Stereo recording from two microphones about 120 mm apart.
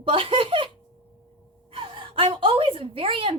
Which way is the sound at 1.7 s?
45° right (ahead or behind).